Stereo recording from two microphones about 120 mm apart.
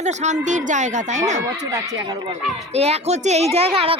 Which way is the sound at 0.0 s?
75° right (ahead or behind).